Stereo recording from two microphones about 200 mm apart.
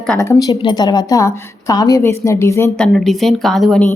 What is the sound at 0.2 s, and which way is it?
A woman's voice, 15° left (ahead or behind).